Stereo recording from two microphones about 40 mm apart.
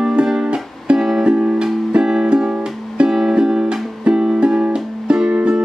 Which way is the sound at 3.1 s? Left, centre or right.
Centre.